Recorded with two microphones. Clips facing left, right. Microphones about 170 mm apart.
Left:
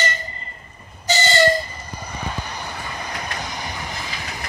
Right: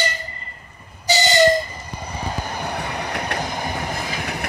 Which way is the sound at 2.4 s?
55° right (ahead or behind).